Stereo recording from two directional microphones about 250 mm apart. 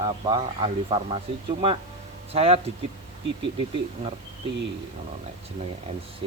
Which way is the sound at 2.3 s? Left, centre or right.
Right.